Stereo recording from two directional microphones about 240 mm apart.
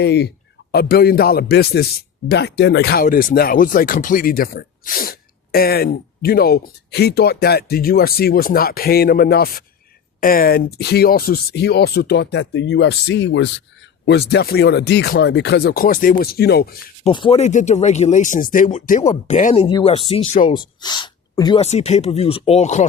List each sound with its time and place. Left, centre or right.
0.0 s speech: left
17.0 s speech: left